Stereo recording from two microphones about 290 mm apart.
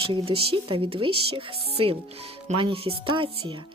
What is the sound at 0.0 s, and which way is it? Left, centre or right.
Speech, centre.